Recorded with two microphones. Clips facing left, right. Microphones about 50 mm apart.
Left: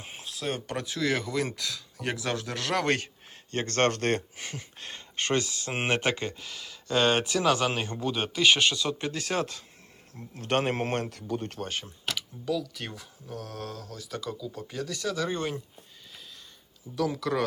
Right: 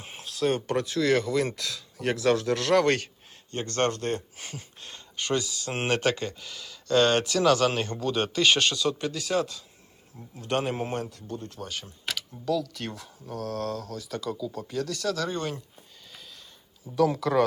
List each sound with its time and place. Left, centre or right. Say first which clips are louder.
0.0 s speech: right 7 dB; centre
3.5 s speech: left 1 dB; left
3.9 s speech: left 3 dB; left
4.4 s speech: left 2 dB; left
5.7 s speech: right 1 dB; centre
9.1 s speech: right 2 dB; left
11.1 s speech: left 4 dB; left
11.9 s speech: even; centre
16.9 s speech: right 5 dB; centre